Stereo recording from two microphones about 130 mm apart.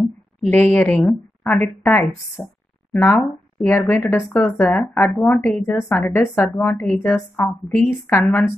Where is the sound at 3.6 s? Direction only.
10° left (ahead or behind).